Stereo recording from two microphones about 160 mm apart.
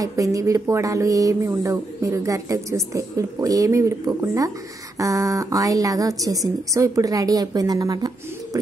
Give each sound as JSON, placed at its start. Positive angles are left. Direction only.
{"t": 0.0, "sound": "speech", "side_deg": -20}